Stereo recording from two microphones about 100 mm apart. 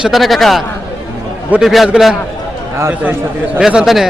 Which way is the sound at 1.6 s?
Centre (ahead or behind).